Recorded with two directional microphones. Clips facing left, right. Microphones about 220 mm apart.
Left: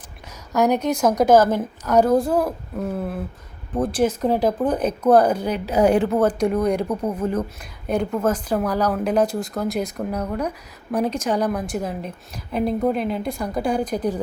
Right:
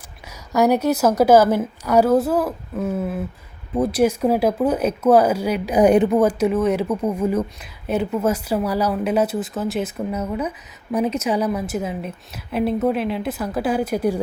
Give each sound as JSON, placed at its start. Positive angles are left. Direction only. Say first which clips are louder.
{"t": 0.5, "sound": "a woman's voice", "louder": "right 2 dB", "side_deg": -10}